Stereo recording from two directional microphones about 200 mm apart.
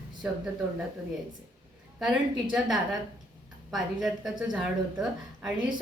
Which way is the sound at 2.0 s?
Centre (ahead or behind).